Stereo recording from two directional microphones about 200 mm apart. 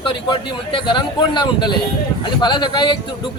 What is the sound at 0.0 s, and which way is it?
Speech, 25° left (ahead or behind).